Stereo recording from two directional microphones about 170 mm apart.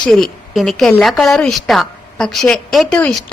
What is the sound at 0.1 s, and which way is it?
A woman's voice, centre (ahead or behind).